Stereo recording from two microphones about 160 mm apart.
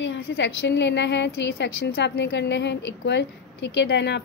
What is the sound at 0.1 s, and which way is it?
A woman's voice, 90° left.